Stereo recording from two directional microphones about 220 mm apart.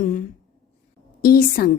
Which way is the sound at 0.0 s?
40° left (ahead or behind).